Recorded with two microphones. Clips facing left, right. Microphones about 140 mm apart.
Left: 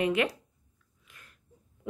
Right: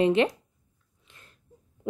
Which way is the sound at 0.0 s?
30° right (ahead or behind).